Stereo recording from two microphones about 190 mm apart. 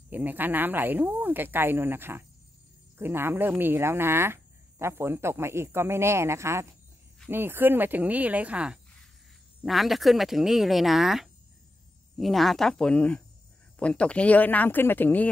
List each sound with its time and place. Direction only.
0.1 s speech: 10° right (ahead or behind); by 15.2 s 10° left (ahead or behind)